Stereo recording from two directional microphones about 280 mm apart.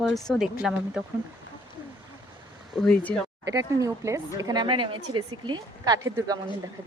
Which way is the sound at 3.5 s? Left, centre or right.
Centre.